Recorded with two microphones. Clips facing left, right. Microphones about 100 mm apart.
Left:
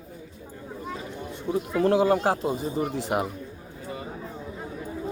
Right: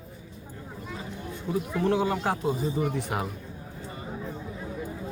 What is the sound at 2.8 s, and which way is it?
Speech, 50° left (ahead or behind).